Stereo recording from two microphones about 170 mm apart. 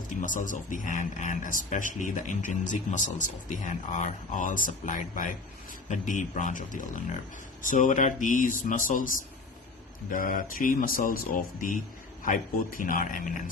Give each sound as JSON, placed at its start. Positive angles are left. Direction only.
{"t": 0.2, "sound": "speech", "side_deg": 50}
{"t": 12.2, "sound": "speech", "side_deg": 50}